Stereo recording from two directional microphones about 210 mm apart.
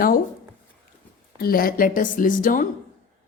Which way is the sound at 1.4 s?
45° left (ahead or behind).